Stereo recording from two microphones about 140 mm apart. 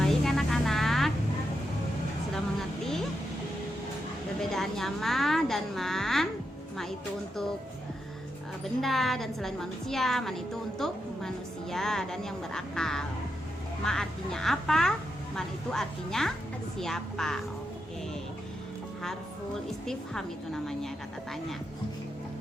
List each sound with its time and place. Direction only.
0.0 s music: centre (ahead or behind)
4.4 s a woman's voice: centre (ahead or behind)
8.8 s a woman's voice: centre (ahead or behind)
19.8 s a woman's voice: 5° left (ahead or behind)